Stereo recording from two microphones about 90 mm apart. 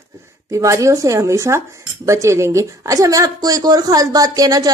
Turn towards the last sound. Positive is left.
turn(degrees=-45)  # may be behind; listen again after turning